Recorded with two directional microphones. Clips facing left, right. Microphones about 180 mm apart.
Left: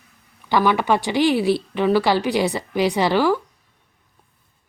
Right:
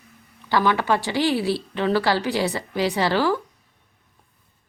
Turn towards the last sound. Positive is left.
turn(degrees=15)  # may be behind; listen again after turning